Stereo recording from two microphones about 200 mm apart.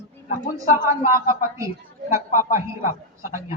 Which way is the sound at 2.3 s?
45° left (ahead or behind).